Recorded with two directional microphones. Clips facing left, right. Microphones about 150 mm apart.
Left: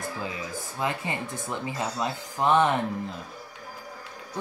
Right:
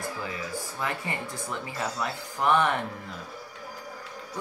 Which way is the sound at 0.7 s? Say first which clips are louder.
Left 4 dB; 20° left (ahead or behind).